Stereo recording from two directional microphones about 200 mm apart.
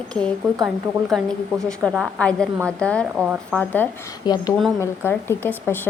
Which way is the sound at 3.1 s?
5° right (ahead or behind).